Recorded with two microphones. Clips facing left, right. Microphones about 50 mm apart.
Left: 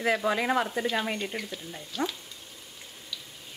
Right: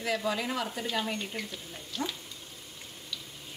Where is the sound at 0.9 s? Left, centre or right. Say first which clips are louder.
Left 3 dB; left.